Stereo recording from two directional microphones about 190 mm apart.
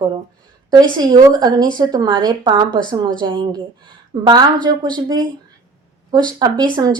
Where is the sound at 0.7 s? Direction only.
20° right (ahead or behind).